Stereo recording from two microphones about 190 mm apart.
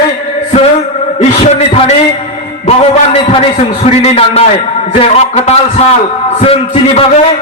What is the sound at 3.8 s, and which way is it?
A man's voice, 35° left (ahead or behind).